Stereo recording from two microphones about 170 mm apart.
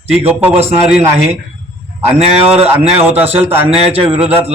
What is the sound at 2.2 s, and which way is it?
Speech, 35° right (ahead or behind).